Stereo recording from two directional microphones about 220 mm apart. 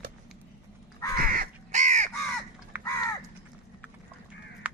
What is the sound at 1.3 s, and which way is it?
Crow, 35° right (ahead or behind).